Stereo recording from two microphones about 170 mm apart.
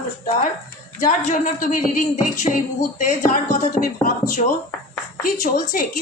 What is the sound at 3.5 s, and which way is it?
Speech, 50° left (ahead or behind).